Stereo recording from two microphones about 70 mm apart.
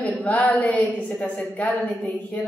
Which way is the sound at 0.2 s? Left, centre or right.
Left.